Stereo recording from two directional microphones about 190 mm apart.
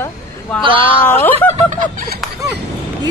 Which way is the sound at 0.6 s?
25° right (ahead or behind).